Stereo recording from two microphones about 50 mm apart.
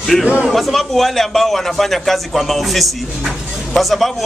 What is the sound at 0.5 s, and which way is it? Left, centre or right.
A man's voice, centre.